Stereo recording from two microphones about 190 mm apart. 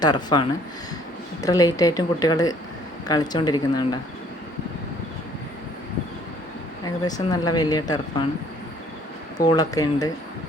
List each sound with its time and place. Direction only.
0.0 s a woman's voice: 20° left (ahead or behind)
6.8 s a woman's voice: 20° left (ahead or behind)
9.4 s a woman's voice: 20° left (ahead or behind)